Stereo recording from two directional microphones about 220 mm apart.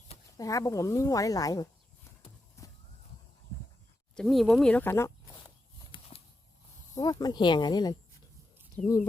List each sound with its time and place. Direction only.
0.3 s speech: 15° left (ahead or behind)
2.6 s walk: 15° left (ahead or behind)
4.1 s speech: centre (ahead or behind)
5.9 s a sound: 25° left (ahead or behind)
6.9 s speech: 20° left (ahead or behind)